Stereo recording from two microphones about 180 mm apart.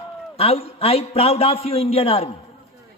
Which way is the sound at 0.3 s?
35° left (ahead or behind).